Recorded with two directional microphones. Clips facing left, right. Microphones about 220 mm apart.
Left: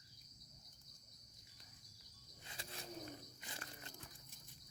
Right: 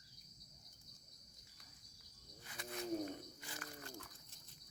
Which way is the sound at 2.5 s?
30° left (ahead or behind).